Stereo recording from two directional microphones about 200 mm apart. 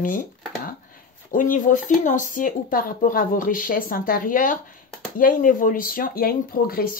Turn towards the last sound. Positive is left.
turn(degrees=45)  # may be behind; listen again after turning